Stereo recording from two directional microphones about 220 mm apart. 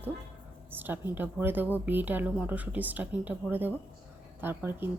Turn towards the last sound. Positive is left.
turn(degrees=-10)  # may be behind; listen again after turning